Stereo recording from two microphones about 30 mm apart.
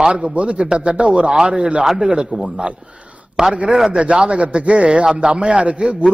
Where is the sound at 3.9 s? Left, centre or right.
Right.